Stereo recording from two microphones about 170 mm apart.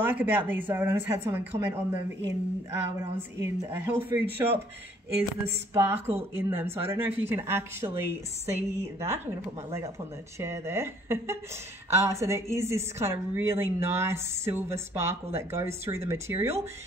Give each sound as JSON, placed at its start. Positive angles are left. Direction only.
{"t": 0.0, "sound": "speech", "side_deg": -10}
{"t": 3.2, "sound": "speech", "side_deg": -15}
{"t": 5.7, "sound": "speech", "side_deg": -15}